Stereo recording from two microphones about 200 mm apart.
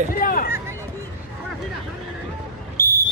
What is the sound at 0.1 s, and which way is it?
Hubbub, 45° left (ahead or behind).